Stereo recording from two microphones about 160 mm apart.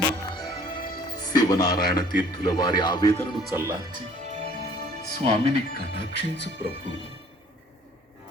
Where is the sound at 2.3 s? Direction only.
30° left (ahead or behind).